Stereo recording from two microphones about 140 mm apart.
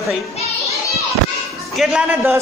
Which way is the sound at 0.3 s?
50° left (ahead or behind).